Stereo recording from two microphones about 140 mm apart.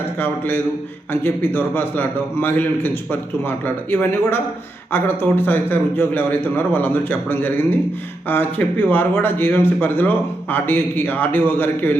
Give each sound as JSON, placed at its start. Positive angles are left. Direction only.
{"t": 0.2, "sound": "speech", "side_deg": 15}